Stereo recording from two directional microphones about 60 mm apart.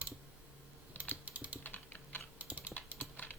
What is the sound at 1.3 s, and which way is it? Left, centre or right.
Typing, right.